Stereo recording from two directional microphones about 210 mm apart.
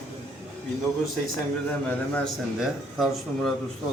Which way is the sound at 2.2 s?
Centre (ahead or behind).